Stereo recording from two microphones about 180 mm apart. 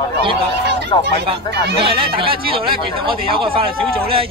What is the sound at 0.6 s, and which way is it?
Speech, 70° right (ahead or behind).